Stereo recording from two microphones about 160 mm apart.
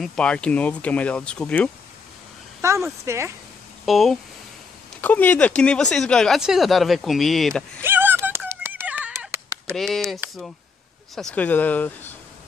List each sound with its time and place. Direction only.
0.0 s speech: 5° left (ahead or behind)
2.6 s speech: 20° right (ahead or behind)
3.8 s speech: centre (ahead or behind)
7.8 s a sound: 10° right (ahead or behind)
9.8 s speech: centre (ahead or behind)